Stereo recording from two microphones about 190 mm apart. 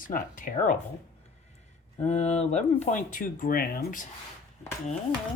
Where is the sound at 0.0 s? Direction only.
45° left (ahead or behind).